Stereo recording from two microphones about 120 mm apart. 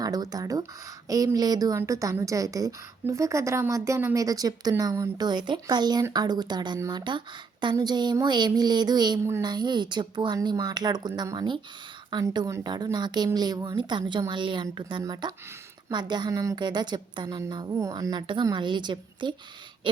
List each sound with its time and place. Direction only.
0.0 s a woman's voice: 30° right (ahead or behind)